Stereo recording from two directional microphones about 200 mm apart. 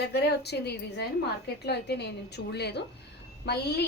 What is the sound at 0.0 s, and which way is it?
A woman's voice, 55° left (ahead or behind).